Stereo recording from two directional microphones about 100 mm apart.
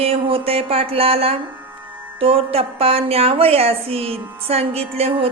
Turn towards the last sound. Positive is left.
turn(degrees=-90)